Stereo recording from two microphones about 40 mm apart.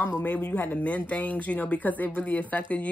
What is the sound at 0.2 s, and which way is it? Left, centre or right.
Speech, left.